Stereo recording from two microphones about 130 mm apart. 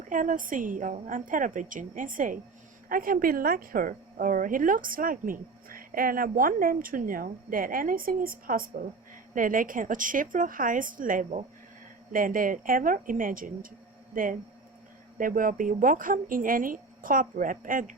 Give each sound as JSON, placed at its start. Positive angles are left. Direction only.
{"t": 0.1, "sound": "a woman's voice", "side_deg": -90}
{"t": 12.1, "sound": "a woman's voice", "side_deg": -90}